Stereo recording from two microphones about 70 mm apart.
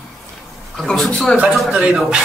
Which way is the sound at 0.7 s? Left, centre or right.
Centre.